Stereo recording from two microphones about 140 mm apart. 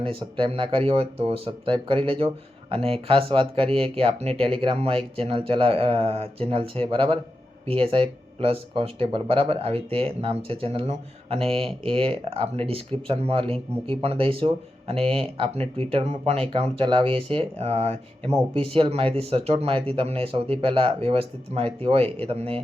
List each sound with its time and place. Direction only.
0.0 s speech: 40° right (ahead or behind)
18.3 s speech: 30° right (ahead or behind)
18.7 s speech: 40° right (ahead or behind)